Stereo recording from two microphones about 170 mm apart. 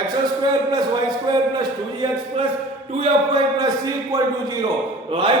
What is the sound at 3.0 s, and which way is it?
A man's voice, 25° right (ahead or behind).